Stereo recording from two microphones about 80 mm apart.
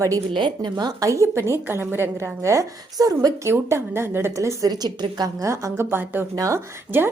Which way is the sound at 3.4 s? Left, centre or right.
Right.